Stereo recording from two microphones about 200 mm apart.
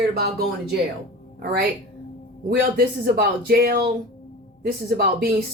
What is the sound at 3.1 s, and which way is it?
Speech, 50° right (ahead or behind).